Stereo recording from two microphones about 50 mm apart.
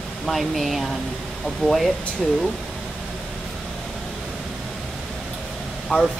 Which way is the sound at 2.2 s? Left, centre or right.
Centre.